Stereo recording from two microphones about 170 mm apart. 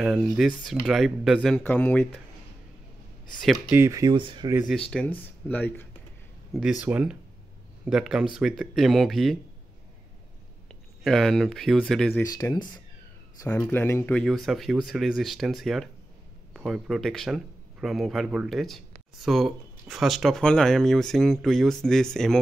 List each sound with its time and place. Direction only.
0.0 s speech: 5° right (ahead or behind)
3.7 s speech: 15° right (ahead or behind)
4.6 s speech: 5° left (ahead or behind)
6.5 s speech: 5° right (ahead or behind)
11.1 s speech: centre (ahead or behind)
12.3 s speech: 20° left (ahead or behind)
13.4 s speech: 15° left (ahead or behind)